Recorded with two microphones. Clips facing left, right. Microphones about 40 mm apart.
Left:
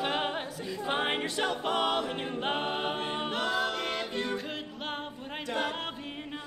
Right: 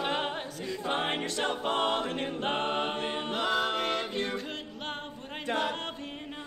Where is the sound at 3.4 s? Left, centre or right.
Right.